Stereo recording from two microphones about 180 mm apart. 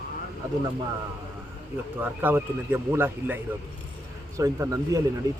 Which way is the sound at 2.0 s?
10° right (ahead or behind).